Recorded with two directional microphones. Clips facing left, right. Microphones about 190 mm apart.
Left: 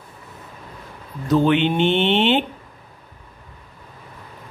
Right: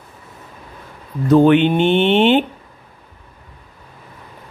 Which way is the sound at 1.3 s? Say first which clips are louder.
Right 6 dB; 50° right (ahead or behind).